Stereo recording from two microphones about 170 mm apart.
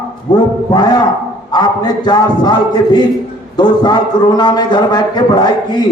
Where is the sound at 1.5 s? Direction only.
25° left (ahead or behind).